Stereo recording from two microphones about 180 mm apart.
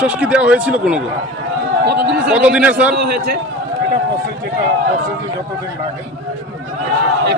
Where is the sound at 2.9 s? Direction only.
65° right (ahead or behind).